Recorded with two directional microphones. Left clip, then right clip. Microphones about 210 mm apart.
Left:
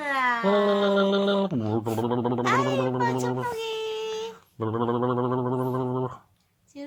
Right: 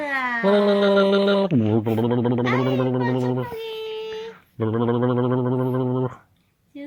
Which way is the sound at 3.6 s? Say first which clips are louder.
Even; 30° left (ahead or behind).